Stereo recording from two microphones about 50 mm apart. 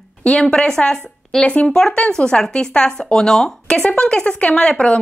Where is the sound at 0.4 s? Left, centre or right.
Centre.